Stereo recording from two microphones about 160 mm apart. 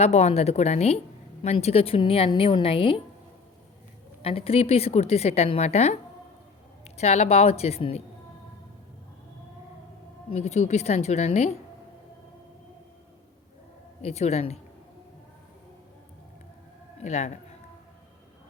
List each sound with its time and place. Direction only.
0.0 s a woman's voice: 40° left (ahead or behind)
4.2 s a woman's voice: 35° left (ahead or behind)
10.2 s a woman's voice: 40° left (ahead or behind)
14.0 s a woman's voice: 40° left (ahead or behind)
17.0 s a woman's voice: 45° left (ahead or behind)